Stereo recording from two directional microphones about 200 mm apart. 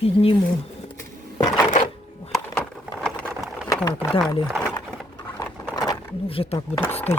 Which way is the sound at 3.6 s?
20° left (ahead or behind).